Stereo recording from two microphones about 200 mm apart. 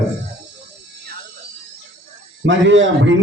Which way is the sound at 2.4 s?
70° right (ahead or behind).